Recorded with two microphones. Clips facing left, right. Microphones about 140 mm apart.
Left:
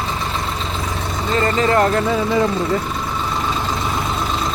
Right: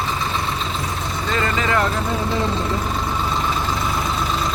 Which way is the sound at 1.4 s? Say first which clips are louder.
Left 5 dB; 40° left (ahead or behind).